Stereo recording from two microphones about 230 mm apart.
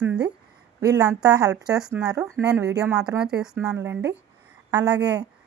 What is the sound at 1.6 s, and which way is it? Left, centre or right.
Speech, centre.